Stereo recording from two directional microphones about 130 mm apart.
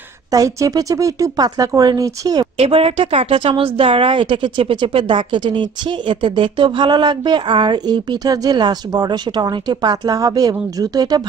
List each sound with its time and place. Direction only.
0.3 s speech: 25° right (ahead or behind)
2.6 s a woman's voice: 50° right (ahead or behind); by 11.2 s 30° right (ahead or behind)